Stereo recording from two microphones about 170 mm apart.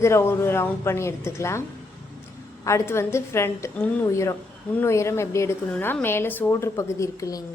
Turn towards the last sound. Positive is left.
turn(degrees=20)  # may be behind; listen again after turning